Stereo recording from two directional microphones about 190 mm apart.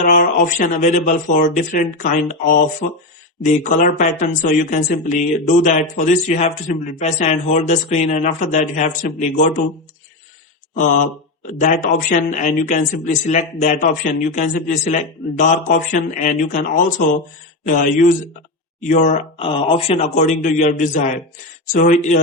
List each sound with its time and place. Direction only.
0.0 s a man's voice: 45° left (ahead or behind)
11.5 s a man's voice: 40° left (ahead or behind)